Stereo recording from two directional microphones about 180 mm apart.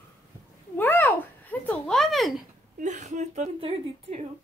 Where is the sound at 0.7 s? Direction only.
10° left (ahead or behind).